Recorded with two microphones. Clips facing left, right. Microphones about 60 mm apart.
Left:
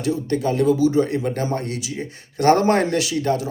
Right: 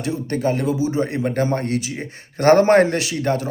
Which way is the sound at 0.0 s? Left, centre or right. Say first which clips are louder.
Even; right.